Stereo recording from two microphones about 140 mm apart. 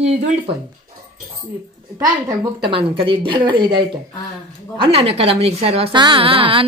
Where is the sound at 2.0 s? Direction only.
25° right (ahead or behind).